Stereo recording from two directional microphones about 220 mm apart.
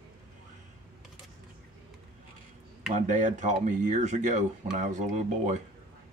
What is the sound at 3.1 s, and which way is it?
Speech, 35° right (ahead or behind).